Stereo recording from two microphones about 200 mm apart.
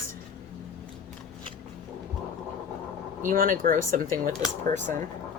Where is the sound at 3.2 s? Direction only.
40° right (ahead or behind).